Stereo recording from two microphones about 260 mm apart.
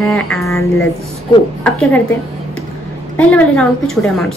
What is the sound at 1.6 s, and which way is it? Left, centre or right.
Speech, centre.